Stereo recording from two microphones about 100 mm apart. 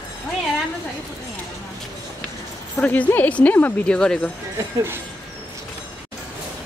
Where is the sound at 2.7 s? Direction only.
15° left (ahead or behind).